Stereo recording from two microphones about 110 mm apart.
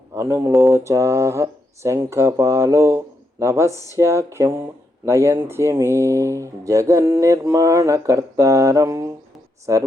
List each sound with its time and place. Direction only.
0.1 s speech: 25° right (ahead or behind)